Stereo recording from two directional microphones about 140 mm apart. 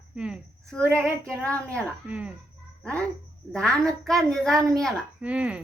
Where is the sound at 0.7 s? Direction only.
10° left (ahead or behind).